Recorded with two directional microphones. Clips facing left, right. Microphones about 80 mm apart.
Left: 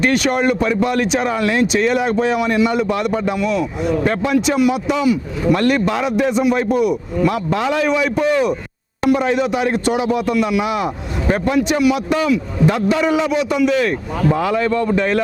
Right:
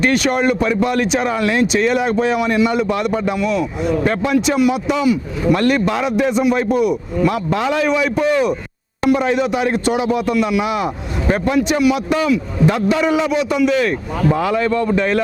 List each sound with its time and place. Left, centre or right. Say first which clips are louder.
0.0 s speech: even; centre